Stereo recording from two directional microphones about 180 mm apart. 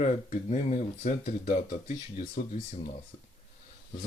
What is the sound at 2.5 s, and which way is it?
Speech, 45° left (ahead or behind).